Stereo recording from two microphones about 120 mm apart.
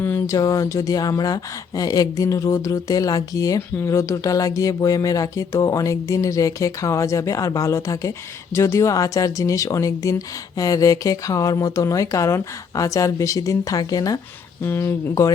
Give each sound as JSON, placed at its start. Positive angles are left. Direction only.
{"t": 0.0, "sound": "a sound", "side_deg": 15}
{"t": 0.3, "sound": "speech", "side_deg": 30}
{"t": 14.6, "sound": "speech", "side_deg": 20}